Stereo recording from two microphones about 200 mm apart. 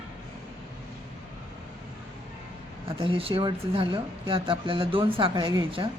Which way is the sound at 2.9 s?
25° right (ahead or behind).